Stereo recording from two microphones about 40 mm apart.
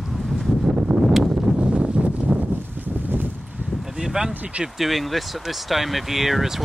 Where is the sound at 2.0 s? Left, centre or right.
Centre.